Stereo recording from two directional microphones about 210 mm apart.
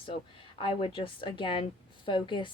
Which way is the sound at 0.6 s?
25° left (ahead or behind).